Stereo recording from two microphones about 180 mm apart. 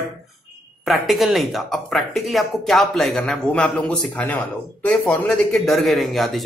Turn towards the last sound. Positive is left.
turn(degrees=0)  # may be behind; listen again after turning